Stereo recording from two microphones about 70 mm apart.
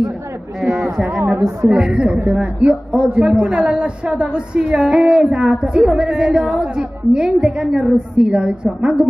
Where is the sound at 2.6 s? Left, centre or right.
Centre.